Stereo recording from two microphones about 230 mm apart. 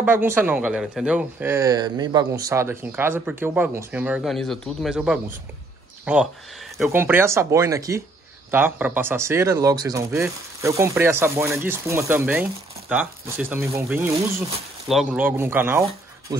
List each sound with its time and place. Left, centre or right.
0.0 s speech: centre